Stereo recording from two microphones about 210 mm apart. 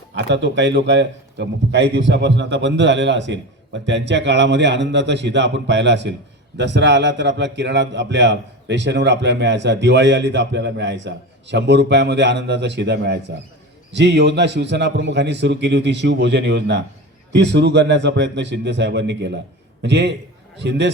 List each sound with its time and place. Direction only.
0.1 s a man's voice: 60° right (ahead or behind)